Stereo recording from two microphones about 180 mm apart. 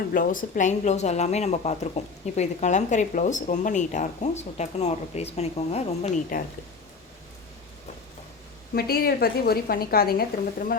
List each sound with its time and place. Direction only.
0.1 s a woman's voice: 50° left (ahead or behind)
6.3 s speech: 50° left (ahead or behind)
8.7 s a woman's voice: 60° left (ahead or behind)